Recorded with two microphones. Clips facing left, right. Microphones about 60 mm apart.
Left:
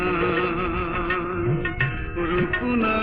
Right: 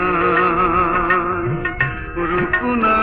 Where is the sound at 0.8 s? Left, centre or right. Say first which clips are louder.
Right 9 dB; right.